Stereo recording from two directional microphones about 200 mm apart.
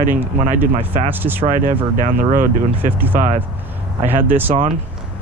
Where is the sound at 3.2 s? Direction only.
40° right (ahead or behind).